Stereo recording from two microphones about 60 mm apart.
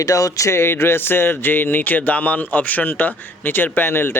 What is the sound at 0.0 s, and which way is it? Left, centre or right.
A man's voice, left.